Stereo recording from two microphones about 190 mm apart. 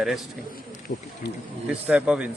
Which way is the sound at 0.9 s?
40° left (ahead or behind).